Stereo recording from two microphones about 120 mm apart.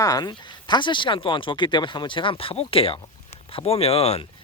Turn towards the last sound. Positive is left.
turn(degrees=55)  # may be behind; listen again after turning